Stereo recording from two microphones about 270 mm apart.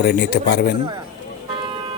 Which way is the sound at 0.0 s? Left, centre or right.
Left.